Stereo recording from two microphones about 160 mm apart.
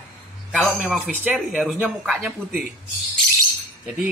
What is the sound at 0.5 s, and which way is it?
Speech, 5° left (ahead or behind).